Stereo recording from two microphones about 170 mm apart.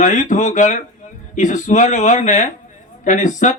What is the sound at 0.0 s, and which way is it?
A man's voice, 45° left (ahead or behind).